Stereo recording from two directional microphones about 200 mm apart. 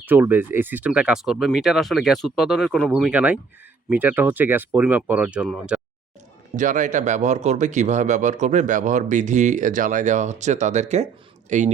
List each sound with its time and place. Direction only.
0.0 s speech: 10° right (ahead or behind)
6.6 s a man's voice: 40° right (ahead or behind)